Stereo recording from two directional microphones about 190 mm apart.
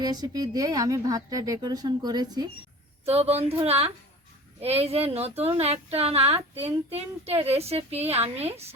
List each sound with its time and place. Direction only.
0.0 s speech: 20° right (ahead or behind)
3.1 s speech: 35° right (ahead or behind)